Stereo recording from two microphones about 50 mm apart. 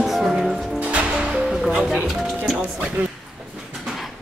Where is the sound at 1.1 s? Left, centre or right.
Centre.